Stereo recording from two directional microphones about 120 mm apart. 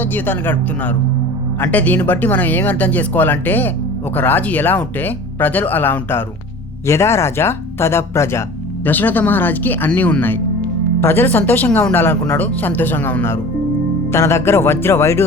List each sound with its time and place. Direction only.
0.0 s speech: 15° left (ahead or behind)